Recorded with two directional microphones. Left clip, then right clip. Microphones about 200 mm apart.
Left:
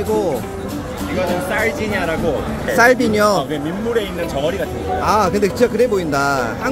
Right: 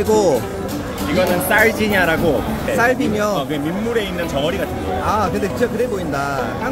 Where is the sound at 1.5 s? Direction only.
40° right (ahead or behind).